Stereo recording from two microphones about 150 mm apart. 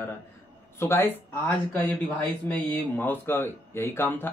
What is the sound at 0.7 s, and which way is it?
Speech, 15° left (ahead or behind).